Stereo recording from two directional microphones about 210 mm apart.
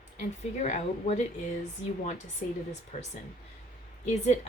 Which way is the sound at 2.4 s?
40° left (ahead or behind).